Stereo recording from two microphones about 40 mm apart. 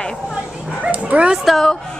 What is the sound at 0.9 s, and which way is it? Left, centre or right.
Dog, right.